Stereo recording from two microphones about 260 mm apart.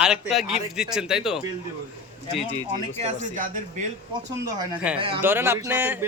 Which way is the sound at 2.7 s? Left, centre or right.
Right.